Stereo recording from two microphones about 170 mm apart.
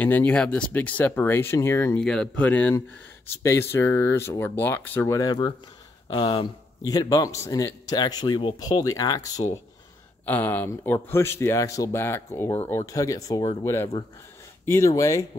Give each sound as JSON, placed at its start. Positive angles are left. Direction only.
{"t": 0.0, "sound": "speech", "side_deg": 10}
{"t": 2.0, "sound": "speech", "side_deg": 5}
{"t": 6.9, "sound": "speech", "side_deg": 20}
{"t": 10.2, "sound": "speech", "side_deg": 10}